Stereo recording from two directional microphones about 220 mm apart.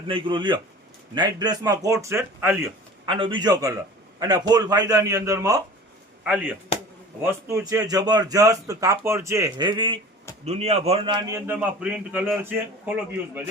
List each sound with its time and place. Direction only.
0.1 s a man's voice: 20° right (ahead or behind)
3.1 s a man's voice: 20° right (ahead or behind)
11.3 s speech: 10° right (ahead or behind)